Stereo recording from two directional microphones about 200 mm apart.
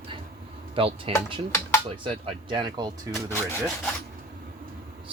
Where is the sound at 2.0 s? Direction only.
25° right (ahead or behind).